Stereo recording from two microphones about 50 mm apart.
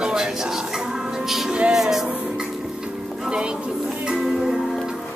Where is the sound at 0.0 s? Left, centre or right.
Centre.